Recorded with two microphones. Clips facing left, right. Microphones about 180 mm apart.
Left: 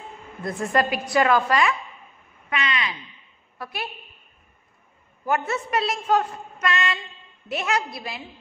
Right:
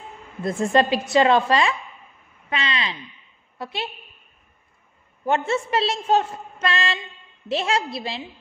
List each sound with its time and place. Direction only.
0.4 s a woman's voice: 25° right (ahead or behind)
5.2 s a woman's voice: 25° right (ahead or behind)